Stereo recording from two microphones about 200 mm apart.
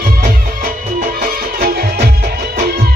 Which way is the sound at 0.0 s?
45° right (ahead or behind).